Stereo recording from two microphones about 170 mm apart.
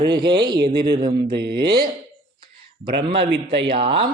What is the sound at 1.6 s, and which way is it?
Speech, 25° right (ahead or behind).